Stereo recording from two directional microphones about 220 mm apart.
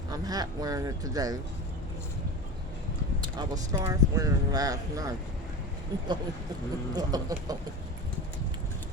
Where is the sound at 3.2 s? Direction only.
20° right (ahead or behind).